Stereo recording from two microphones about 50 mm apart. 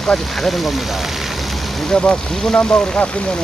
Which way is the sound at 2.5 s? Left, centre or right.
Left.